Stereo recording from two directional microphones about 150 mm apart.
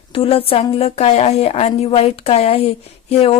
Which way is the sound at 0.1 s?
40° left (ahead or behind).